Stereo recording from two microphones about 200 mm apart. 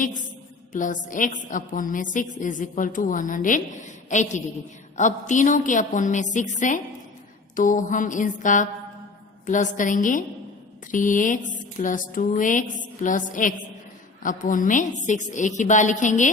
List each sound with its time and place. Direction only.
0.7 s a woman's voice: 40° left (ahead or behind)